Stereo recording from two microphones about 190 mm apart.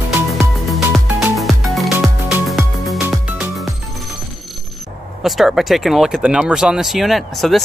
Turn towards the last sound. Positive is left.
turn(degrees=0)  # may be behind; listen again after turning